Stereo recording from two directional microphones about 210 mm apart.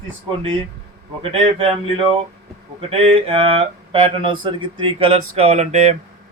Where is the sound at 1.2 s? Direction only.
25° right (ahead or behind).